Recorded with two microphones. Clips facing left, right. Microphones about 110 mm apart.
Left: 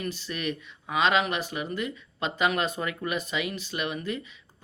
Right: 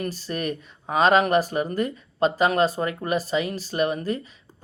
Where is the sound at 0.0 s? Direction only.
40° right (ahead or behind).